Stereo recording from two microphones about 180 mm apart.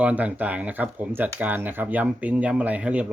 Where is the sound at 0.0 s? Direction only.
10° right (ahead or behind).